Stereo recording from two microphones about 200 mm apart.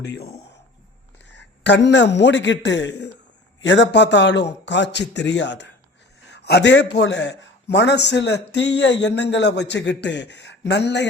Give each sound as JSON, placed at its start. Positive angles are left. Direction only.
{"t": 0.0, "sound": "a man's voice", "side_deg": 60}
{"t": 1.3, "sound": "a man's voice", "side_deg": 60}